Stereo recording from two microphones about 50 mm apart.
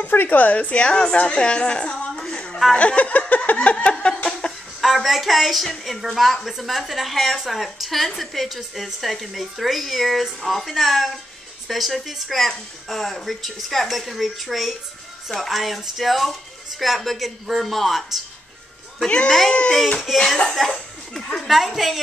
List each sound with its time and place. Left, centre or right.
0.0 s a woman's voice: left; by 2.6 s centre
2.7 s a sound: left
4.2 s chicken: centre
4.5 s a woman's voice: centre
19.0 s a sound: left
20.1 s a woman's voice: centre
21.5 s a woman's voice: centre